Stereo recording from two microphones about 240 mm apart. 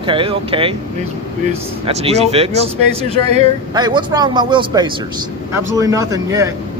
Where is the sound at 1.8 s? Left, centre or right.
Right.